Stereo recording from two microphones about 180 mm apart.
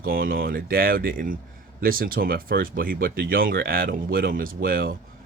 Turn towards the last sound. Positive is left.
turn(degrees=-55)  # may be behind; listen again after turning